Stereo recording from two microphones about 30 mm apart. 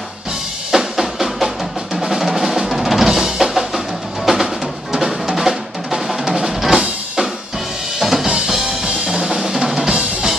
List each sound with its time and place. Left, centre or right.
0.7 s drum: centre
2.0 s music: centre
4.9 s drum: centre
6.4 s drum kit: centre
8.0 s music: centre
8.8 s drum: right
9.4 s drum: centre